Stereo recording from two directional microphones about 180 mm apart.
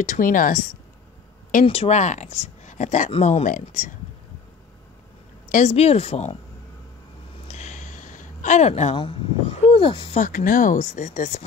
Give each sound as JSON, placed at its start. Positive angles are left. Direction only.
{"t": 0.0, "sound": "speech", "side_deg": 45}
{"t": 5.5, "sound": "speech", "side_deg": 40}
{"t": 7.4, "sound": "a sound", "side_deg": 40}
{"t": 10.2, "sound": "speech", "side_deg": 50}